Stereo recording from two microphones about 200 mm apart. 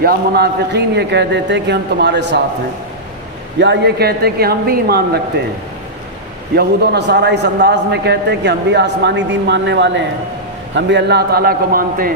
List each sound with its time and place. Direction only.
0.0 s a man's voice: 50° right (ahead or behind)
3.6 s a man's voice: 60° right (ahead or behind)
6.6 s a man's voice: 55° right (ahead or behind)